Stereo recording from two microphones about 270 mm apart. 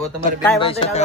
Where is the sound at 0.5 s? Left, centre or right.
Centre.